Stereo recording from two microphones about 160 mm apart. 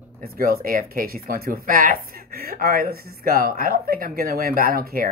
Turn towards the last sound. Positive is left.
turn(degrees=-70)  # may be behind; listen again after turning